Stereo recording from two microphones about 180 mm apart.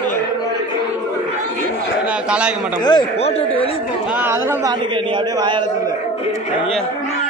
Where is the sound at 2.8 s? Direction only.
25° left (ahead or behind).